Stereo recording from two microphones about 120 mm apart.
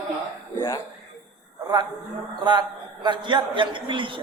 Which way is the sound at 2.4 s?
35° right (ahead or behind).